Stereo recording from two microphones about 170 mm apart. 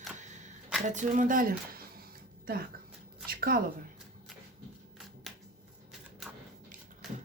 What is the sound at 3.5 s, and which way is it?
Speech, 55° right (ahead or behind).